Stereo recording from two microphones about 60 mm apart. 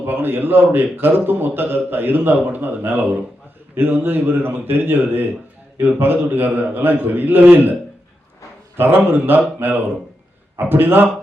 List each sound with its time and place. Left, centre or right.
0.0 s a man's voice: right